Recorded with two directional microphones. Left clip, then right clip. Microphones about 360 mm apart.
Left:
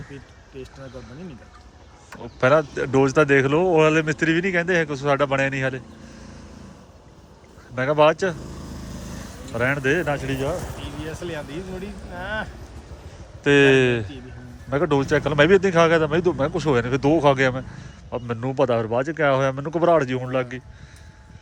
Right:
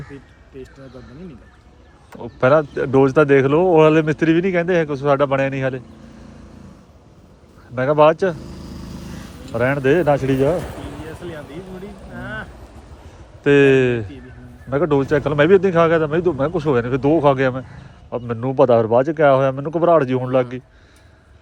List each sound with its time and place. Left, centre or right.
0.1 s a sound: centre
2.2 s speech: centre
7.8 s speech: centre
9.5 s speech: centre
11.3 s a sound: left
13.4 s speech: centre